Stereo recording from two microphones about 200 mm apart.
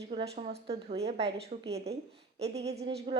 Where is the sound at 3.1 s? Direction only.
25° right (ahead or behind).